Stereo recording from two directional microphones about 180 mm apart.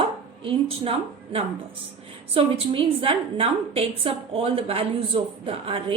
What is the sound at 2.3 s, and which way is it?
A woman's voice, 30° right (ahead or behind).